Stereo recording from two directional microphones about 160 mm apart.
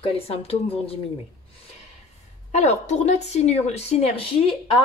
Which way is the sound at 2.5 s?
45° left (ahead or behind).